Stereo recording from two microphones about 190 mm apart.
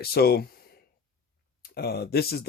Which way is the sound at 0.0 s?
55° left (ahead or behind).